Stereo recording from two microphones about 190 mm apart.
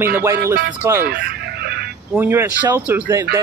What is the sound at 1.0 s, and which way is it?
Music, 55° right (ahead or behind).